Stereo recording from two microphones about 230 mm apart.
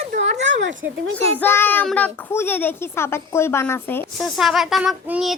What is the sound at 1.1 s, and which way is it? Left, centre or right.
A woman's voice, centre.